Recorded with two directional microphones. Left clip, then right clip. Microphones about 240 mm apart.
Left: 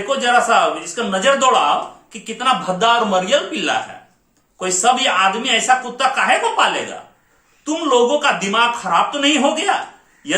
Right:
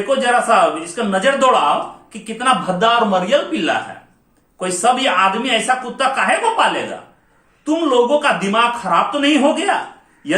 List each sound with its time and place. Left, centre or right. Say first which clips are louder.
0.1 s speech: even; centre